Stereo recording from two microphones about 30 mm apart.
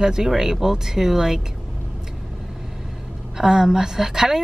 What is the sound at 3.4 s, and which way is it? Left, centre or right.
Speech, centre.